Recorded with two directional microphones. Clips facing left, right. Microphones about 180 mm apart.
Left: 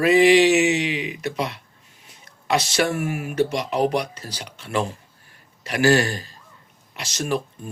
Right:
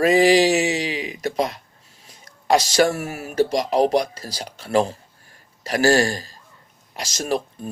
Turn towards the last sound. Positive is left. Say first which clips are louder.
# right 1 dB
turn(degrees=-40)  # may be behind; listen again after turning